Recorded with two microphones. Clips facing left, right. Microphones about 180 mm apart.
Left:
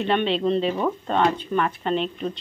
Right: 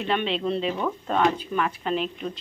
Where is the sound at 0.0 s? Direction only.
Centre (ahead or behind).